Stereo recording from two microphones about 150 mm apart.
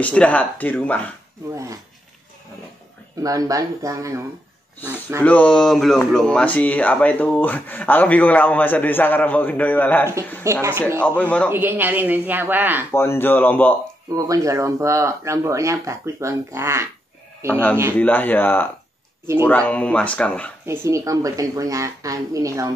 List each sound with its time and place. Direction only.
0.0 s speech: 10° left (ahead or behind)
1.5 s speech: 20° right (ahead or behind)
3.2 s speech: 25° right (ahead or behind)
5.2 s speech: 10° left (ahead or behind)
10.4 s speech: 15° right (ahead or behind)
11.0 s speech: 10° left (ahead or behind)
11.5 s speech: 15° right (ahead or behind)
12.9 s speech: 15° left (ahead or behind)
14.1 s speech: 25° right (ahead or behind)
17.5 s speech: 10° left (ahead or behind)
20.6 s speech: 20° right (ahead or behind)